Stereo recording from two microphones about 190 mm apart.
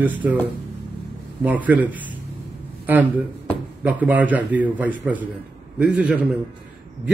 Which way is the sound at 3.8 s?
10° right (ahead or behind).